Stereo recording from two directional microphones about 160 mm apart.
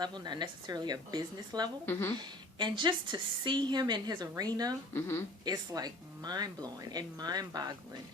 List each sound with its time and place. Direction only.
0.0 s a woman's voice: 25° right (ahead or behind)
1.9 s a woman's voice: 15° left (ahead or behind)
2.1 s a woman's voice: 30° right (ahead or behind)
4.9 s a woman's voice: 15° left (ahead or behind)
5.5 s a woman's voice: 25° right (ahead or behind)